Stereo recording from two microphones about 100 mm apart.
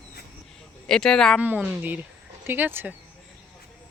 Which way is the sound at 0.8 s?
5° left (ahead or behind).